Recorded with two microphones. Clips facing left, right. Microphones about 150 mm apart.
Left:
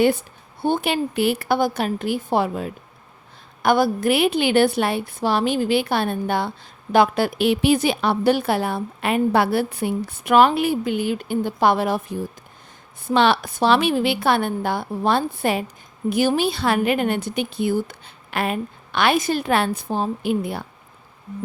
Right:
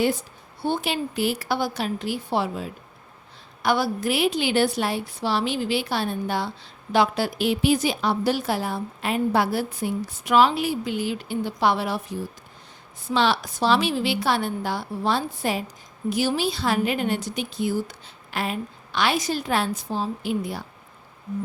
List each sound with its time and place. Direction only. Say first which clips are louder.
0.0 s a woman's voice: left 5 dB; 60° left (ahead or behind)